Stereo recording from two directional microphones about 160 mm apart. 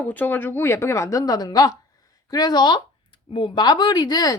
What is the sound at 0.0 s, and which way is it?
A woman's voice, 10° left (ahead or behind).